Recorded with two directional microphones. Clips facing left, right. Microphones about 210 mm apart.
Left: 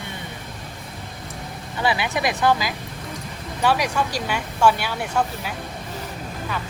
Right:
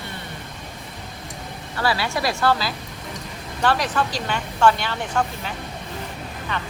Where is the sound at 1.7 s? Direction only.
20° left (ahead or behind).